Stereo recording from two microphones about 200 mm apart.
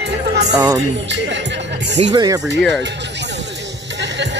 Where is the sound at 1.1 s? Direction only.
60° right (ahead or behind).